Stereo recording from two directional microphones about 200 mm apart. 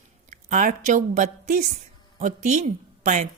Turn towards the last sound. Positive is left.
turn(degrees=-40)  # may be behind; listen again after turning